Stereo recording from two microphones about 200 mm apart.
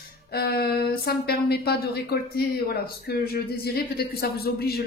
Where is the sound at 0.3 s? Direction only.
50° left (ahead or behind).